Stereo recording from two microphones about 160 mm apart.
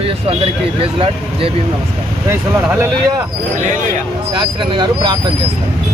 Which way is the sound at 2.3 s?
15° right (ahead or behind).